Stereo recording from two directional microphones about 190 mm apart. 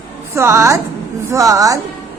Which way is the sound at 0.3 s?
15° right (ahead or behind).